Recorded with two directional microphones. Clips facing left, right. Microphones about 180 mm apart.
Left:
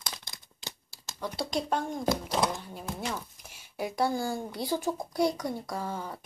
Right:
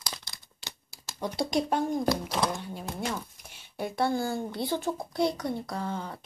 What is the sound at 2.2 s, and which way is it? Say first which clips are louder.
A child's voice: even; centre (ahead or behind).